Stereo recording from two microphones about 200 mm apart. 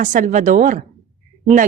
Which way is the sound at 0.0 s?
40° right (ahead or behind).